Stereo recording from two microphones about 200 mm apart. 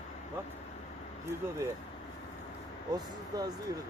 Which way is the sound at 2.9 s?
20° right (ahead or behind).